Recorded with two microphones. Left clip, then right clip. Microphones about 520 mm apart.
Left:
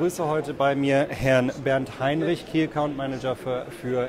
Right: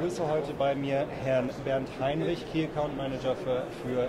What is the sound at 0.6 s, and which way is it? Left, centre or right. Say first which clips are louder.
Speech: left 10 dB; left.